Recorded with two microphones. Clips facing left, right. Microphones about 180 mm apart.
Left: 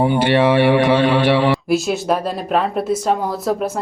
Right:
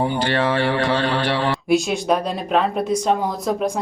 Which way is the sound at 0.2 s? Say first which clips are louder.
Left 6 dB; 20° left (ahead or behind).